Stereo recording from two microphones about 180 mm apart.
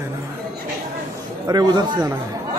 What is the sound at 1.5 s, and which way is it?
Speech, 20° right (ahead or behind).